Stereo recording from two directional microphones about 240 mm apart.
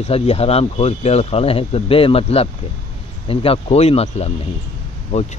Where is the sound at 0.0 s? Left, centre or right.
Left.